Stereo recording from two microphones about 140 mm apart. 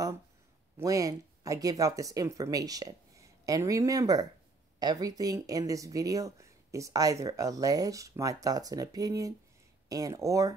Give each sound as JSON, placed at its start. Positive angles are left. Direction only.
{"t": 0.7, "sound": "speech", "side_deg": -25}